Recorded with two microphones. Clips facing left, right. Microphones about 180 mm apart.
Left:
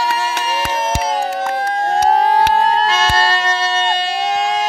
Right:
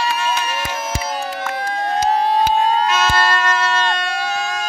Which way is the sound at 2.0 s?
80° left.